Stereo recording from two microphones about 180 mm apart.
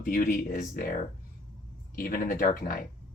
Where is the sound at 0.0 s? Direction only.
45° left (ahead or behind).